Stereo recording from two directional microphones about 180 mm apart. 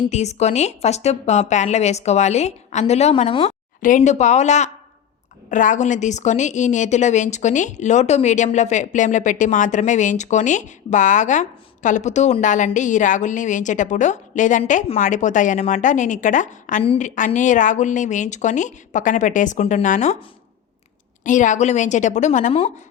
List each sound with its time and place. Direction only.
0.1 s a woman's voice: 40° left (ahead or behind)
16.8 s a woman's voice: 30° left (ahead or behind)
17.2 s a woman's voice: 45° left (ahead or behind)
21.2 s a woman's voice: 45° left (ahead or behind)